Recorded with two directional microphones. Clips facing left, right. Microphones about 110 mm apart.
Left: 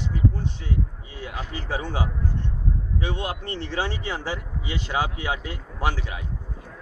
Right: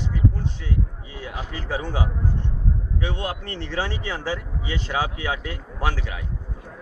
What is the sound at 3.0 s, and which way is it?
A man's voice, 20° left (ahead or behind).